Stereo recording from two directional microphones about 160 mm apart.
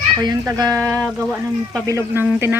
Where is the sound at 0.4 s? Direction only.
20° right (ahead or behind).